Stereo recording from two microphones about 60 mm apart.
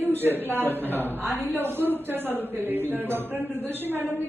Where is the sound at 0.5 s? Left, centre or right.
Right.